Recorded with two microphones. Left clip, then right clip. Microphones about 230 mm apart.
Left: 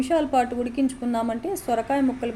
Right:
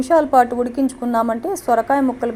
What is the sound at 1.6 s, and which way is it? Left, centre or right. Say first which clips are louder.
Speech: right 9 dB; right.